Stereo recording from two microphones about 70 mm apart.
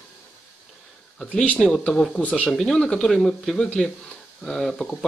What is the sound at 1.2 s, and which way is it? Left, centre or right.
Speech, centre.